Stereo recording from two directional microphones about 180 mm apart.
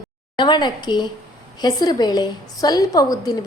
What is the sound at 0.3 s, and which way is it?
A woman's voice, 25° left (ahead or behind).